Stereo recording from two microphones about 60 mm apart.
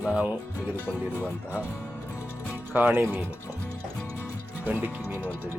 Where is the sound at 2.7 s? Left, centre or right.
Right.